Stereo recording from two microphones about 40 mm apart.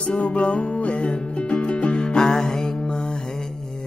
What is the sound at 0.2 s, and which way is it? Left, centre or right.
Music, left.